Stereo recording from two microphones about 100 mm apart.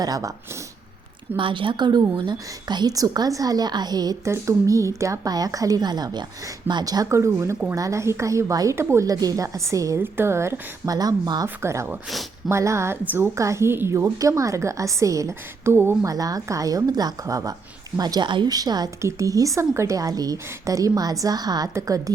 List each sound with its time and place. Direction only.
0.0 s a woman's voice: 35° right (ahead or behind)
1.4 s a woman's voice: 55° right (ahead or behind); by 4.2 s 40° right (ahead or behind)
4.2 s a woman's voice: 30° right (ahead or behind)
10.9 s a woman's voice: 40° right (ahead or behind)
11.4 s a woman's voice: 30° right (ahead or behind)
16.0 s a woman's voice: 40° right (ahead or behind)
18.5 s a woman's voice: 40° right (ahead or behind)